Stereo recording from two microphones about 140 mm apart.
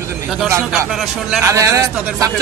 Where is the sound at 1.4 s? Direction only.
20° right (ahead or behind).